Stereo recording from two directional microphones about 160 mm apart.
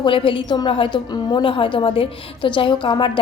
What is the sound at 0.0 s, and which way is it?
A woman's voice, 30° left (ahead or behind).